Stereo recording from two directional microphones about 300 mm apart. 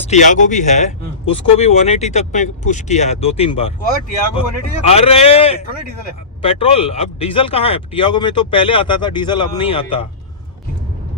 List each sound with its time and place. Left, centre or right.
0.1 s speech: left